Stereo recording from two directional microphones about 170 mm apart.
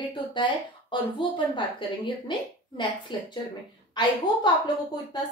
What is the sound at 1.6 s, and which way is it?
Speech, 30° left (ahead or behind).